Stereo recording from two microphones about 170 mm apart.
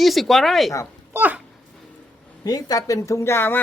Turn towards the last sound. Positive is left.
turn(degrees=15)  # may be behind; listen again after turning